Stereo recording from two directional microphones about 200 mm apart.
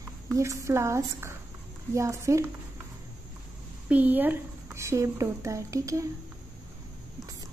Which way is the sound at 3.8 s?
10° right (ahead or behind).